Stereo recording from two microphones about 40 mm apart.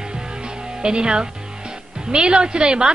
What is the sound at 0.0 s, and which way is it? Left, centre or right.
A woman's voice, centre.